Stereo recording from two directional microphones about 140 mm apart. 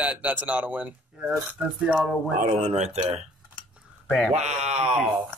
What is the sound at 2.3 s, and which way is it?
Speech, 60° right (ahead or behind).